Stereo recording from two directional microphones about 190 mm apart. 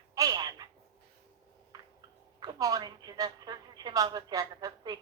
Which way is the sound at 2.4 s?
20° right (ahead or behind).